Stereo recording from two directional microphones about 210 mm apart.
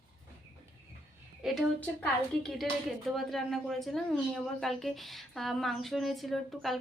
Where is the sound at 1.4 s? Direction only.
Centre (ahead or behind).